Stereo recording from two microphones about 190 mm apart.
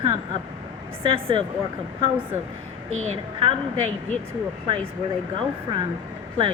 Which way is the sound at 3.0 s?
30° right (ahead or behind).